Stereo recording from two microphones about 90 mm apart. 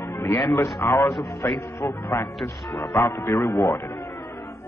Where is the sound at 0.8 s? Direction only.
35° left (ahead or behind).